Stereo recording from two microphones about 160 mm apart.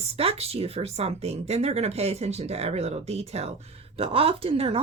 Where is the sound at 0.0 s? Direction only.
40° right (ahead or behind).